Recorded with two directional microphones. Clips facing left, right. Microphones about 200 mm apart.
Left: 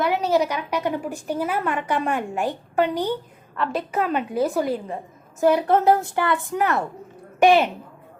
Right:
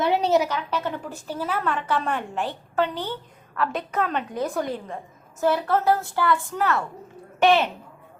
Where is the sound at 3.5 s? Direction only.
Centre (ahead or behind).